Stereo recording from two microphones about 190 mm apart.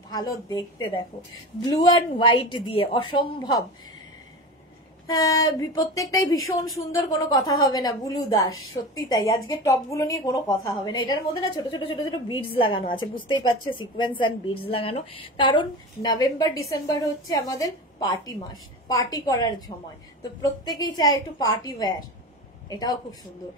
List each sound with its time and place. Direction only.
0.1 s a woman's voice: 20° left (ahead or behind)
5.0 s a woman's voice: 20° left (ahead or behind)